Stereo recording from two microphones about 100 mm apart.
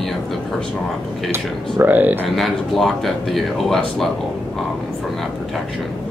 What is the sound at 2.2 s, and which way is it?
Speech, centre (ahead or behind).